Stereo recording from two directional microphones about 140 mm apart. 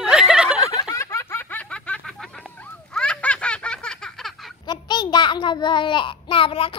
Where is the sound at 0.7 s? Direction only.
25° left (ahead or behind); by 2.1 s 10° left (ahead or behind).